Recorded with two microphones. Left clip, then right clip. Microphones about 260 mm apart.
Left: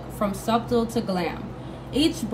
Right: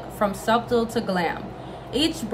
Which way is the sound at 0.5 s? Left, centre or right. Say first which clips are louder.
Right 1 dB; centre.